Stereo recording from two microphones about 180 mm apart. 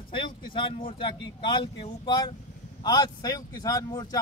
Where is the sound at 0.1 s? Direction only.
30° left (ahead or behind).